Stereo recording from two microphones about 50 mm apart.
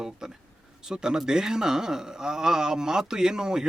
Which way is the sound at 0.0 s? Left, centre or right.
Centre.